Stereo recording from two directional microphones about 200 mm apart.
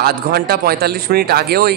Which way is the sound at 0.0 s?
50° right (ahead or behind).